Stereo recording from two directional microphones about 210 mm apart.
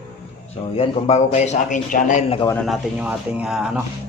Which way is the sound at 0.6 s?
25° left (ahead or behind).